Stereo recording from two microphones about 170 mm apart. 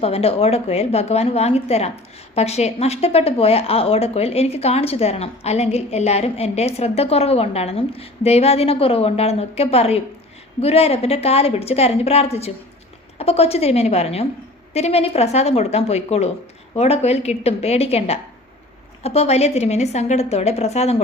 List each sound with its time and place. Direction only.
0.0 s a woman's voice: 35° left (ahead or behind)